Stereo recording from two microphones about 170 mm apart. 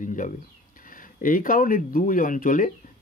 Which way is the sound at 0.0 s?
50° left (ahead or behind).